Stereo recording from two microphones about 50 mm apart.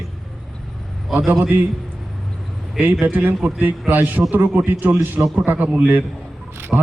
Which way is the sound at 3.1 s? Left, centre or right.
Right.